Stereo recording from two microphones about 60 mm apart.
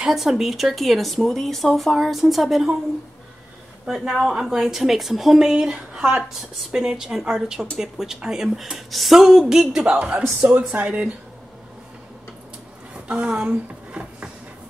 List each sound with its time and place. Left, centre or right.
0.1 s speech: centre
3.8 s a woman's voice: centre
9.8 s speech: right
13.1 s a sound: centre